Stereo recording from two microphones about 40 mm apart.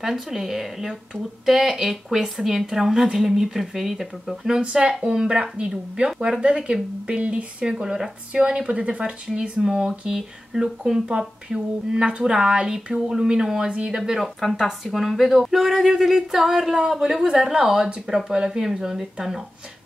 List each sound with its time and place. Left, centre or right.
0.0 s speech: centre
4.6 s speech: right
7.2 s speech: right
7.7 s speech: centre
14.2 s speech: centre